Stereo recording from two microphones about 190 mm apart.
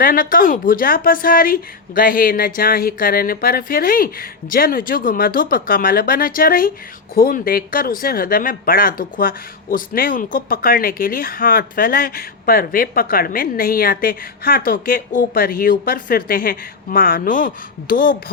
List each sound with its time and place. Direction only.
0.0 s speech: 50° left (ahead or behind)